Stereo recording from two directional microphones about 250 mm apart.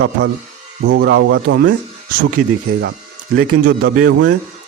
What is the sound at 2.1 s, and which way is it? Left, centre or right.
A man's voice, right.